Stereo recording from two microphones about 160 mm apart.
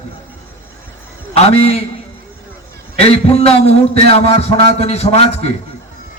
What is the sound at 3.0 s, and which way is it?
A man's voice, 40° left (ahead or behind).